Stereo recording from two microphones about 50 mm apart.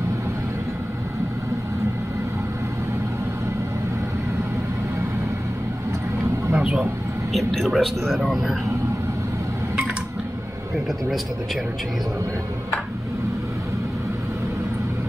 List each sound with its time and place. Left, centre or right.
6.5 s vehicle: right
7.3 s a man's voice: centre